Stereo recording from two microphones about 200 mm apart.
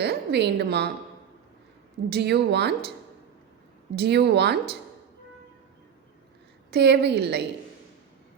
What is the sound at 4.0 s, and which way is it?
Speech, 55° right (ahead or behind).